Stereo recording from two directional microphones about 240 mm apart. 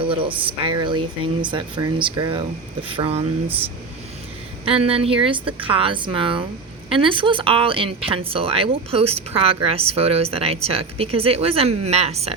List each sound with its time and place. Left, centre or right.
0.0 s speech: right
4.6 s speech: right